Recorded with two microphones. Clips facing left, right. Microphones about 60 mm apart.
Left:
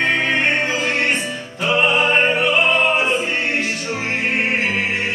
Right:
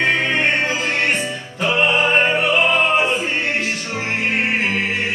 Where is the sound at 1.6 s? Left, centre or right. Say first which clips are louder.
Even; centre.